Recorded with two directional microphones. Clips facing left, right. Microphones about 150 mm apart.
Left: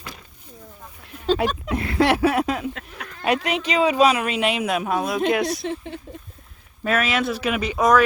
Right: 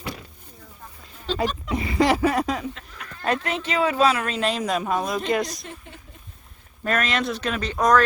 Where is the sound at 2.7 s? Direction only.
75° left (ahead or behind).